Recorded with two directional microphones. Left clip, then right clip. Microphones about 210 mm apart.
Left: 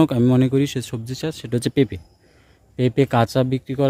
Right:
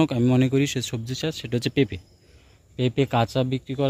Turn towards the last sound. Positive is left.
turn(degrees=25)  # may be behind; listen again after turning